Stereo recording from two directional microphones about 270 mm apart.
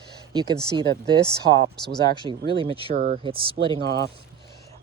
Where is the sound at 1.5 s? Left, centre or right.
Right.